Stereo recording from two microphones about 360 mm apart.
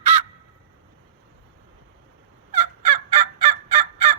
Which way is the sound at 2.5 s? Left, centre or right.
Centre.